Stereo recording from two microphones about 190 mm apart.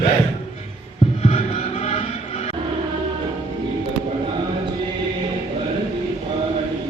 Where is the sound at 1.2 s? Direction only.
30° left (ahead or behind).